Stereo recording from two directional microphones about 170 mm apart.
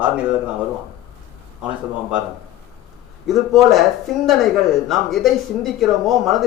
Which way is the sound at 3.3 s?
Centre (ahead or behind).